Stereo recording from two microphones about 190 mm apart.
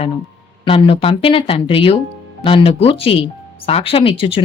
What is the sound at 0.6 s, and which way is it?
Speech, 30° left (ahead or behind).